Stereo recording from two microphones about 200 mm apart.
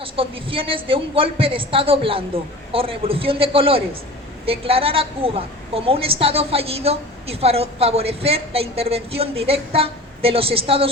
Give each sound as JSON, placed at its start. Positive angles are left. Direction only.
{"t": 0.0, "sound": "a woman's voice", "side_deg": -25}